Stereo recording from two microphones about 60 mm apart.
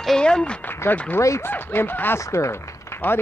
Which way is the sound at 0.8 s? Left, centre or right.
Left.